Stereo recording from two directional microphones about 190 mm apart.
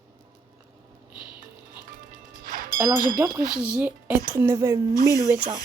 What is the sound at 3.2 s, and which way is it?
Speech, 15° right (ahead or behind).